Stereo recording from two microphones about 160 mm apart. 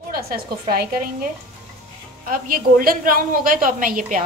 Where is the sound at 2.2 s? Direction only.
60° right (ahead or behind).